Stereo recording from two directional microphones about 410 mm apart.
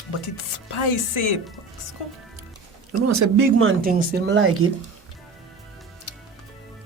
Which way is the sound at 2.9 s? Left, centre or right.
Right.